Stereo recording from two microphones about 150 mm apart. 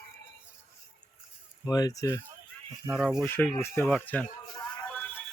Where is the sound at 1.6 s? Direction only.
25° left (ahead or behind).